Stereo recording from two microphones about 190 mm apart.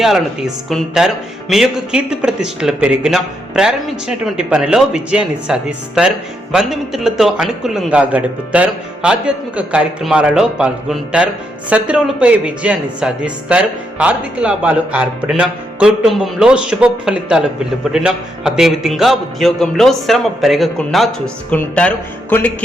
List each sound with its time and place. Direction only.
0.0 s a man's voice: centre (ahead or behind)